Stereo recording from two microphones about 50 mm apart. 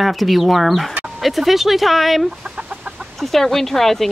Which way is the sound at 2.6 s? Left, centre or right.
Centre.